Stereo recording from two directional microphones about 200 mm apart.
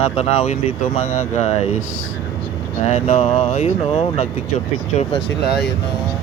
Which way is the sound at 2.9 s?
35° left (ahead or behind).